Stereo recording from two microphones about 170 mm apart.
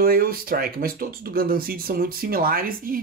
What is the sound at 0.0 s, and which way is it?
Speech, 60° right (ahead or behind).